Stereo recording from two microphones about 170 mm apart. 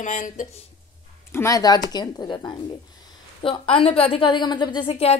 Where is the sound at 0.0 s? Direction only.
50° left (ahead or behind).